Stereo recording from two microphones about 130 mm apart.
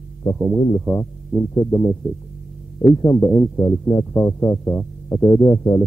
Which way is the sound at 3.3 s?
15° left (ahead or behind).